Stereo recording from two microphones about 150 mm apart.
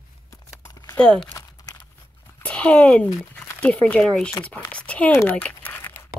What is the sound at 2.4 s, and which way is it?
Speech, 10° left (ahead or behind).